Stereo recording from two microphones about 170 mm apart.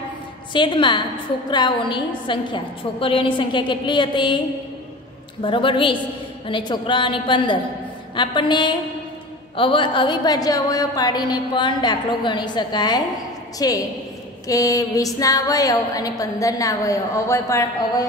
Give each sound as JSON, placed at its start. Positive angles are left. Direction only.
{"t": 0.5, "sound": "a woman's voice", "side_deg": 30}
{"t": 5.4, "sound": "a woman's voice", "side_deg": 30}